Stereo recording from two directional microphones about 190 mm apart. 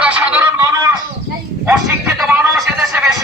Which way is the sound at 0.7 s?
20° right (ahead or behind).